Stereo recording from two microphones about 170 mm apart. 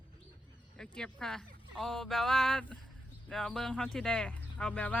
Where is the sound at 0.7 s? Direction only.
5° left (ahead or behind).